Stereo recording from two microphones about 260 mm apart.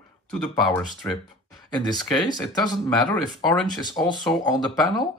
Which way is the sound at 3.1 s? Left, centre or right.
Centre.